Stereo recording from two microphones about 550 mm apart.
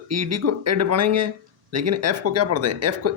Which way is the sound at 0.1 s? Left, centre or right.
Right.